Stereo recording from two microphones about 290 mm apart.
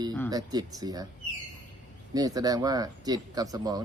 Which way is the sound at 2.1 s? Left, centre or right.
Centre.